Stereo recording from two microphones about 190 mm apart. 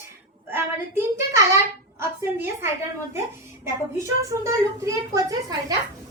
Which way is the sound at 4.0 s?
15° right (ahead or behind).